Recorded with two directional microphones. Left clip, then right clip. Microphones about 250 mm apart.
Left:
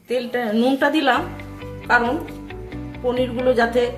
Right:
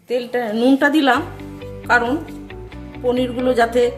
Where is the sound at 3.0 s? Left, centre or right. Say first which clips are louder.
Right 1 dB; right.